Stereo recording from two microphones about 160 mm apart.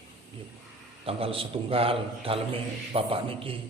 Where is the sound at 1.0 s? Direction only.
35° right (ahead or behind).